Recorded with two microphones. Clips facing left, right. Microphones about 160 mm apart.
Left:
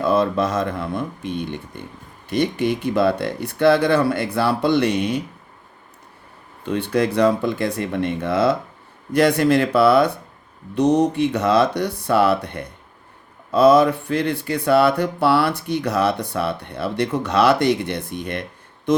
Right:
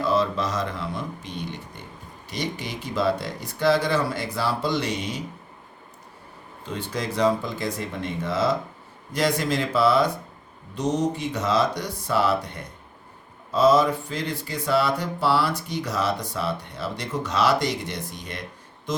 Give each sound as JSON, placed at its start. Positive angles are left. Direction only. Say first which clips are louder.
{"t": 0.0, "sound": "speech", "louder": "left 5 dB", "side_deg": 55}
{"t": 6.7, "sound": "speech", "louder": "left 8 dB", "side_deg": 65}
{"t": 18.9, "sound": "a sound", "louder": "left 11 dB", "side_deg": 60}